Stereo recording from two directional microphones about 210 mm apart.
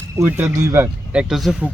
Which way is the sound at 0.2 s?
10° right (ahead or behind).